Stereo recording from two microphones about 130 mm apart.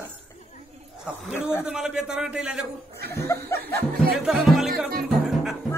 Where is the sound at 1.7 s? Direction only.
5° right (ahead or behind).